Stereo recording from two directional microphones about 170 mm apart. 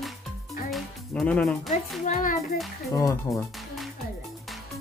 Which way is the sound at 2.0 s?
50° left (ahead or behind).